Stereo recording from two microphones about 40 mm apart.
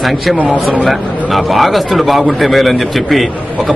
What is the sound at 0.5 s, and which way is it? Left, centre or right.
Speech, right.